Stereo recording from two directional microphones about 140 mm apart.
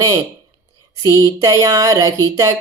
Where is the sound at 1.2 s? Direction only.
25° right (ahead or behind).